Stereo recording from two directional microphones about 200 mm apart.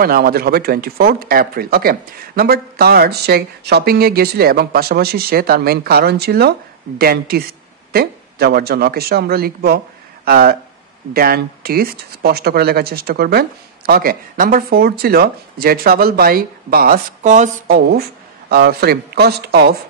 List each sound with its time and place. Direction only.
0.0 s speech: 50° right (ahead or behind)